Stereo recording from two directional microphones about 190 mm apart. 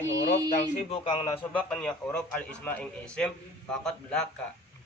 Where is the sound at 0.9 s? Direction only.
25° left (ahead or behind).